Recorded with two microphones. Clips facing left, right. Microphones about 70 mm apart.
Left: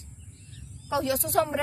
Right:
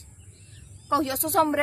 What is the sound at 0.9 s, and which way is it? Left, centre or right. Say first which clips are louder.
Speech: right 2 dB; right.